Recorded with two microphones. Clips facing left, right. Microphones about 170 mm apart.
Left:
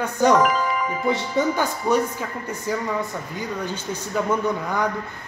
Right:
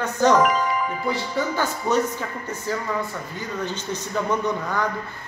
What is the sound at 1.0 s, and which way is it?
Speech, 20° left (ahead or behind).